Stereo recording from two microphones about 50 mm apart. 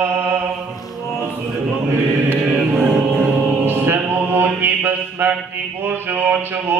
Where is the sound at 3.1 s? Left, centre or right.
Centre.